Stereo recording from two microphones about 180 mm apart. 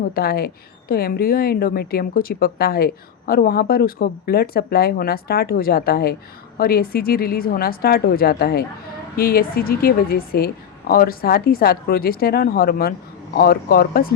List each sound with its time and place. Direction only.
0.0 s speech: 55° left (ahead or behind)